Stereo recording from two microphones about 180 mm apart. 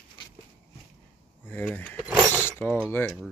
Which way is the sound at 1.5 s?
5° left (ahead or behind).